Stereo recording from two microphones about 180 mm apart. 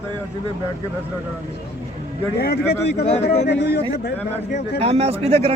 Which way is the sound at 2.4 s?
65° left (ahead or behind).